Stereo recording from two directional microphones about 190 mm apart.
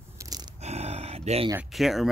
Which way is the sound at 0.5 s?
35° right (ahead or behind).